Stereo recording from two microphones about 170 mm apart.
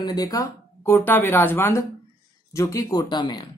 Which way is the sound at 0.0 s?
20° left (ahead or behind).